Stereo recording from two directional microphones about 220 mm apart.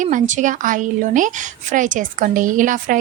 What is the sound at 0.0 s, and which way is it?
A woman's voice, 35° right (ahead or behind).